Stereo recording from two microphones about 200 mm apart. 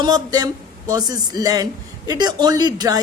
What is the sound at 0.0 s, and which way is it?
A woman's voice, 20° right (ahead or behind).